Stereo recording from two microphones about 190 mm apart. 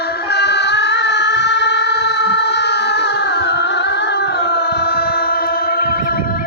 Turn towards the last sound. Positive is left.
turn(degrees=55)  # may be behind; listen again after turning